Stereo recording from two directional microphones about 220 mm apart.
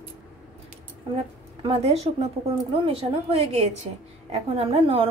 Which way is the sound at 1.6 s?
25° right (ahead or behind).